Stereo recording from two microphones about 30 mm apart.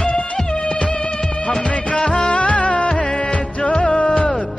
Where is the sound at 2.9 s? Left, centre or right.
Left.